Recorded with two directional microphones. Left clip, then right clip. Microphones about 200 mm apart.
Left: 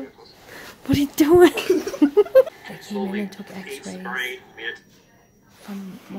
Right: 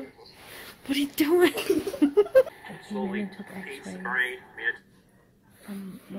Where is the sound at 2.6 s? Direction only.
10° right (ahead or behind).